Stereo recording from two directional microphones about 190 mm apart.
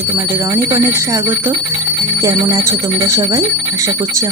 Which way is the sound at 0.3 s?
15° right (ahead or behind).